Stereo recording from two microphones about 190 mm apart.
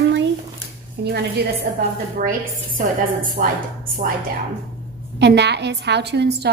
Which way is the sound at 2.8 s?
45° right (ahead or behind).